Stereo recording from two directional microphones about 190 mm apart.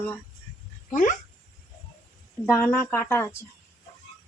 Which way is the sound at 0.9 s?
45° left (ahead or behind).